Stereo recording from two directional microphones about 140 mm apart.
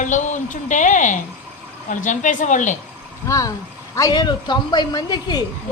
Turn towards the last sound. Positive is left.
turn(degrees=30)  # may be behind; listen again after turning